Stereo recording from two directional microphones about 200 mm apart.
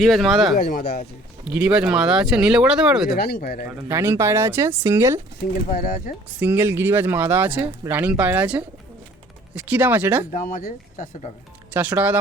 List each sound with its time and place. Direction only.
0.0 s speech: centre (ahead or behind)
0.5 s speech: 45° left (ahead or behind)
1.5 s speech: 5° right (ahead or behind)
3.2 s speech: 50° left (ahead or behind)
3.8 s speech: 10° right (ahead or behind)
6.4 s speech: 10° right (ahead or behind)
10.3 s speech: 45° left (ahead or behind)
11.7 s speech: 5° right (ahead or behind)